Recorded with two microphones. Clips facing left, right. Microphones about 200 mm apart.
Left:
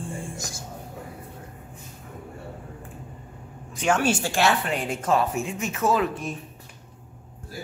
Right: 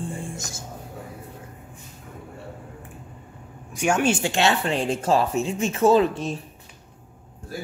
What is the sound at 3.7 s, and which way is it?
Speech, 15° right (ahead or behind).